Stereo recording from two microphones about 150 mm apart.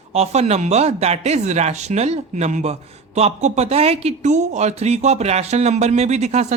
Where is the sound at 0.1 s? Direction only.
45° right (ahead or behind).